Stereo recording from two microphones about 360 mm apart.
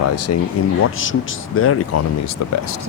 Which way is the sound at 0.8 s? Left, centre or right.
Left.